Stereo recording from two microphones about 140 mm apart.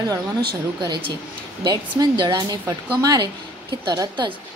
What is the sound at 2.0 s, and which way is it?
A woman's voice, 30° right (ahead or behind).